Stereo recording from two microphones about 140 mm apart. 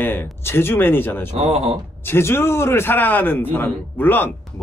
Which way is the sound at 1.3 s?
50° right (ahead or behind).